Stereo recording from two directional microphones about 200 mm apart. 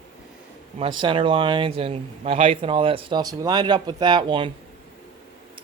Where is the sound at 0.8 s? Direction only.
25° right (ahead or behind).